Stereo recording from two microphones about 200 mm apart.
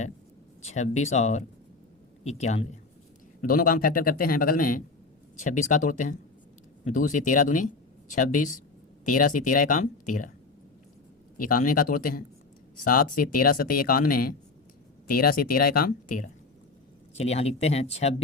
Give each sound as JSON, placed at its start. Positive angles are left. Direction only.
{"t": 0.6, "sound": "speech", "side_deg": 35}
{"t": 3.4, "sound": "speech", "side_deg": 45}
{"t": 11.3, "sound": "speech", "side_deg": 45}